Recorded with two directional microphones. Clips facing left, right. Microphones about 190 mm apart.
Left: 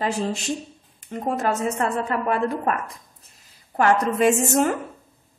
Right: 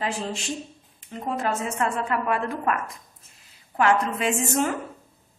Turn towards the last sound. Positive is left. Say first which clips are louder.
# left 5 dB
turn(degrees=45)  # may be behind; listen again after turning